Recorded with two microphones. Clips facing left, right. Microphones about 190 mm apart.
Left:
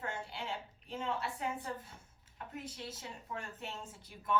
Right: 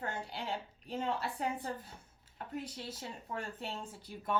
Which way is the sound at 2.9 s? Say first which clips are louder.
Right 2 dB; 30° right (ahead or behind).